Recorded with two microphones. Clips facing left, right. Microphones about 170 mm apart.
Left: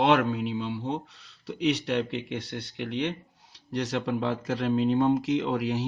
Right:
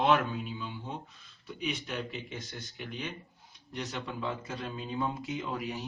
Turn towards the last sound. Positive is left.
turn(degrees=80)